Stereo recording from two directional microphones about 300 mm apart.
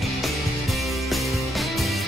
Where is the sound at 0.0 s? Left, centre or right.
Centre.